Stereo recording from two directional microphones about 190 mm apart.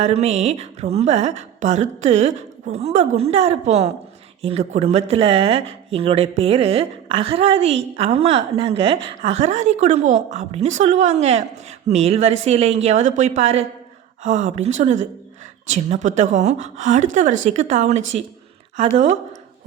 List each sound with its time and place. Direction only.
0.0 s speech: 35° right (ahead or behind)